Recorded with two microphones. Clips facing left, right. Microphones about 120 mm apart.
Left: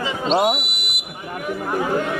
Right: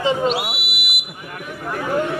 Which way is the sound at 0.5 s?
5° right (ahead or behind).